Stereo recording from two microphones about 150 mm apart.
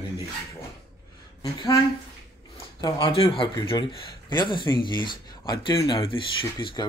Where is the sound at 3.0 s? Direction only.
40° left (ahead or behind).